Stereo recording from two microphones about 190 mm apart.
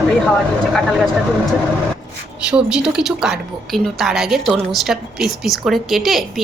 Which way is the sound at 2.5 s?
5° right (ahead or behind).